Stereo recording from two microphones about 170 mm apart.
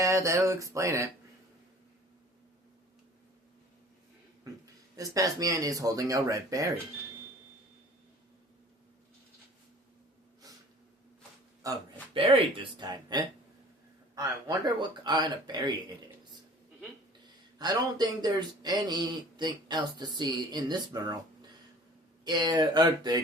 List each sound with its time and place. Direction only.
0.0 s a sound: 20° right (ahead or behind)
4.6 s speech: 20° right (ahead or behind)
11.6 s speech: 20° right (ahead or behind)
12.1 s speech: 30° right (ahead or behind)
17.6 s speech: 25° right (ahead or behind)
22.2 s speech: 25° right (ahead or behind)